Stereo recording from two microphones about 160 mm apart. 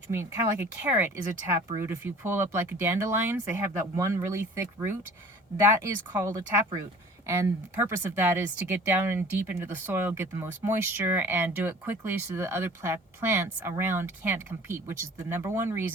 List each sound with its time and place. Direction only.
0.1 s speech: 15° right (ahead or behind)